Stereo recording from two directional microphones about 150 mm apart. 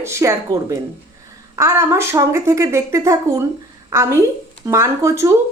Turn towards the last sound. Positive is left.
turn(degrees=-20)  # may be behind; listen again after turning